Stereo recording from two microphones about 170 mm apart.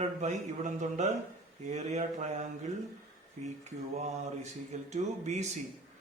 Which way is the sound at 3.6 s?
40° right (ahead or behind).